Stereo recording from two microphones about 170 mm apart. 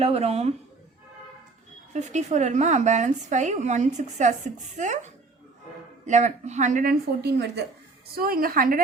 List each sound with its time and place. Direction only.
0.0 s speech: 35° right (ahead or behind)
1.9 s a woman's voice: 45° right (ahead or behind)
7.2 s a woman's voice: 75° right (ahead or behind)
8.1 s a woman's voice: 60° right (ahead or behind)